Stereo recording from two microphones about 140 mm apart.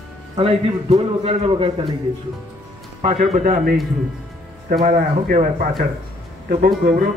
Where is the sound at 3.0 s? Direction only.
60° right (ahead or behind).